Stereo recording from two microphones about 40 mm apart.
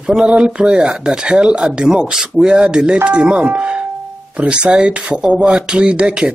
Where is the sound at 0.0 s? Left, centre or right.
Centre.